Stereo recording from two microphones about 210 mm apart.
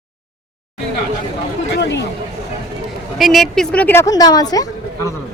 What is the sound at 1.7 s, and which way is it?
Speech, 55° left (ahead or behind).